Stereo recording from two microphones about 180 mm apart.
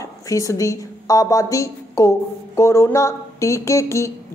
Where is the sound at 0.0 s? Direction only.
20° left (ahead or behind).